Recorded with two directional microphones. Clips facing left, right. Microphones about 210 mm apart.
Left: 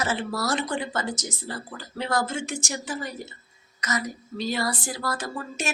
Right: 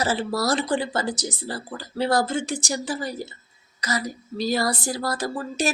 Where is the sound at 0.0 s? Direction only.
35° right (ahead or behind).